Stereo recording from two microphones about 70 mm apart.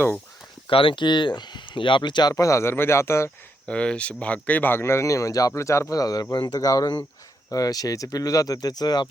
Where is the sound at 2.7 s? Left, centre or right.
Left.